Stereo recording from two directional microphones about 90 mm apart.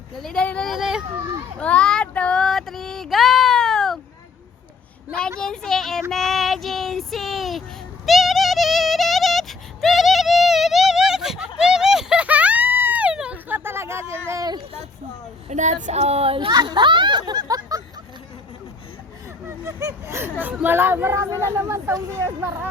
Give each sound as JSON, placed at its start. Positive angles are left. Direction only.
{"t": 0.2, "sound": "speech", "side_deg": 5}
{"t": 0.7, "sound": "a sound", "side_deg": -5}
{"t": 1.5, "sound": "child singing", "side_deg": 10}
{"t": 2.4, "sound": "a sound", "side_deg": 5}
{"t": 5.4, "sound": "speech", "side_deg": 5}
{"t": 6.1, "sound": "child singing", "side_deg": 0}
{"t": 8.0, "sound": "music", "side_deg": 0}
{"t": 16.2, "sound": "speech", "side_deg": -90}
{"t": 16.5, "sound": "speech", "side_deg": -50}
{"t": 19.5, "sound": "speech", "side_deg": -35}
{"t": 20.4, "sound": "speech", "side_deg": -15}